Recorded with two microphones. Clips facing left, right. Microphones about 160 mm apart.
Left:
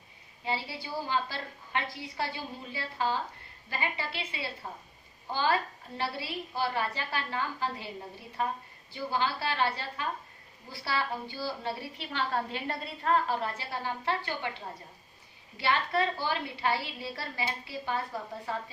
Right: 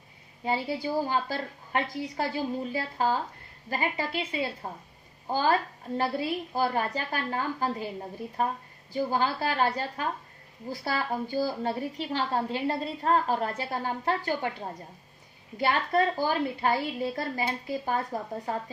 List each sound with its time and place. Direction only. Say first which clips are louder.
0.4 s a woman's voice: right 6 dB; 45° right (ahead or behind)
12.3 s a woman's voice: right 5 dB; 30° right (ahead or behind)